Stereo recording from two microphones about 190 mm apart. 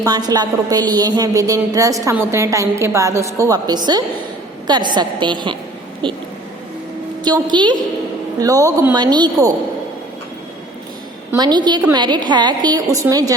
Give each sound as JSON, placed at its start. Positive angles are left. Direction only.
{"t": 0.0, "sound": "a woman's voice", "side_deg": -20}
{"t": 7.3, "sound": "a woman's voice", "side_deg": -25}
{"t": 11.3, "sound": "a woman's voice", "side_deg": -20}